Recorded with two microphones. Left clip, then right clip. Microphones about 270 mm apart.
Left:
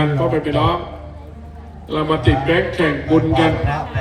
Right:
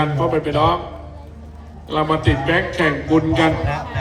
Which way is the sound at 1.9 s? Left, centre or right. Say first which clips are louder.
Left 1 dB; centre.